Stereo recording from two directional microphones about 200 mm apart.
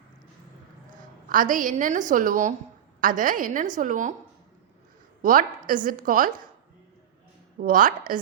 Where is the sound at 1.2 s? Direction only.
40° right (ahead or behind).